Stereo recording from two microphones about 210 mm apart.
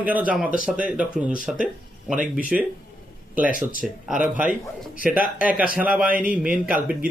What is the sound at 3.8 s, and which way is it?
Speech, centre (ahead or behind).